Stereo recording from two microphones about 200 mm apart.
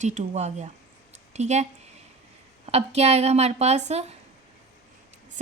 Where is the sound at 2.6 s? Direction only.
30° right (ahead or behind).